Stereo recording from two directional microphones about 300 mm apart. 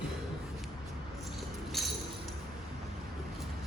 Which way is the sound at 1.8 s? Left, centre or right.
Centre.